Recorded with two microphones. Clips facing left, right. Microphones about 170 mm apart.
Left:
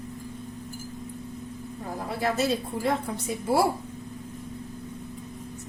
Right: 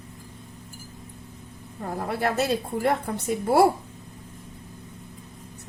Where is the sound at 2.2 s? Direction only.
65° right (ahead or behind).